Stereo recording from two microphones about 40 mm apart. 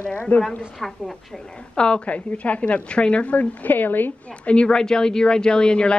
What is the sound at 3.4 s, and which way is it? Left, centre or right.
Speech, left.